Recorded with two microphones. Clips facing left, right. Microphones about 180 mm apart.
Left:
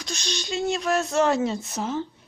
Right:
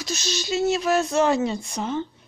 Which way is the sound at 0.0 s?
5° right (ahead or behind).